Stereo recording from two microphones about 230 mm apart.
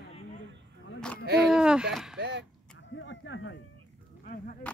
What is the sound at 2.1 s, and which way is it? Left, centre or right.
Speech, right.